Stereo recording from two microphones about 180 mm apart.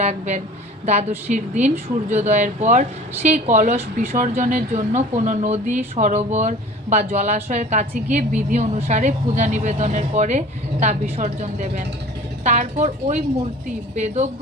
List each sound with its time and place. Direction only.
0.0 s a woman's voice: 40° right (ahead or behind)